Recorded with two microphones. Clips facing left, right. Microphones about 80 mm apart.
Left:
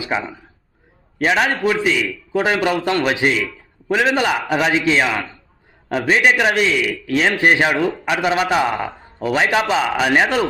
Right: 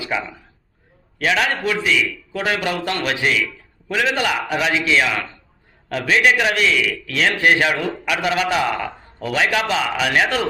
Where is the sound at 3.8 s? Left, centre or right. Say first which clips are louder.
Left 8 dB; left.